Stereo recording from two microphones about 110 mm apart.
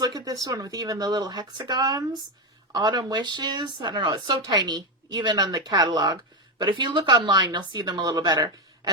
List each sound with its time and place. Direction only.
0.0 s speech: 35° right (ahead or behind)